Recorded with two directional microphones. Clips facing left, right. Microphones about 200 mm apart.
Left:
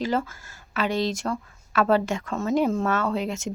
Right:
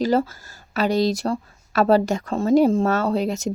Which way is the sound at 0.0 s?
35° right (ahead or behind).